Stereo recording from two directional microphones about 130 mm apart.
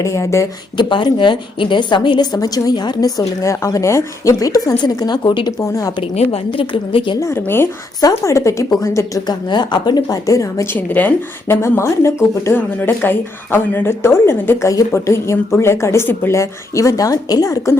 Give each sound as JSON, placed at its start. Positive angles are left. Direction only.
{"t": 0.0, "sound": "a woman's voice", "side_deg": 25}
{"t": 0.8, "sound": "a woman's voice", "side_deg": 35}
{"t": 6.0, "sound": "a woman's voice", "side_deg": 50}
{"t": 7.2, "sound": "a woman's voice", "side_deg": 20}